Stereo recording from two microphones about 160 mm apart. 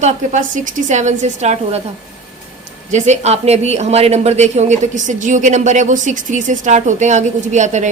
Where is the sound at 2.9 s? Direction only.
45° right (ahead or behind).